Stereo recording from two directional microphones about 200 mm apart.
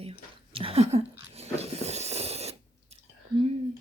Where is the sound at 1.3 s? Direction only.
30° right (ahead or behind).